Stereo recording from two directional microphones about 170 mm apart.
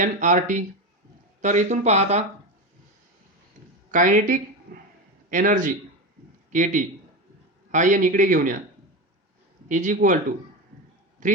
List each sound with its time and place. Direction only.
0.0 s a man's voice: 50° right (ahead or behind)
3.9 s a man's voice: 50° right (ahead or behind)
9.6 s a man's voice: 45° right (ahead or behind)
11.2 s a man's voice: 50° right (ahead or behind)